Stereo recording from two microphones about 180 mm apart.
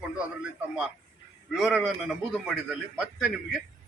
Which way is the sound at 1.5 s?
Centre (ahead or behind).